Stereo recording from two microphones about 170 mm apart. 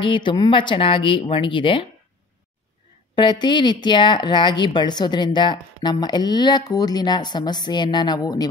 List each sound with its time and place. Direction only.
0.0 s speech: 30° left (ahead or behind)
3.2 s speech: 25° left (ahead or behind)